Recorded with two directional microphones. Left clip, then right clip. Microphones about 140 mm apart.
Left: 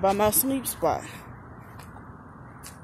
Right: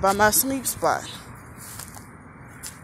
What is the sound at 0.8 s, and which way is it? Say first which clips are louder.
Speech: right 3 dB; 30° left (ahead or behind).